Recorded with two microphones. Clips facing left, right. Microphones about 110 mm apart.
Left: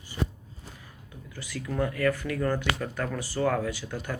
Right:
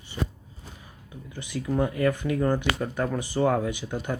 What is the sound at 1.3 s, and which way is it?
Speech, 20° right (ahead or behind).